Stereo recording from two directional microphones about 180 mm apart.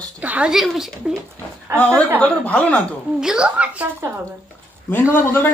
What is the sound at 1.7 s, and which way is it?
Speech, 15° right (ahead or behind).